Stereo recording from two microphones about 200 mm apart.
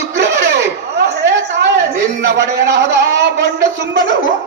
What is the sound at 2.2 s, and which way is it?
Speech, 60° right (ahead or behind).